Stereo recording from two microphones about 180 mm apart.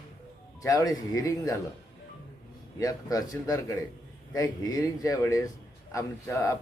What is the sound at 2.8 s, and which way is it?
A man's voice, 20° left (ahead or behind).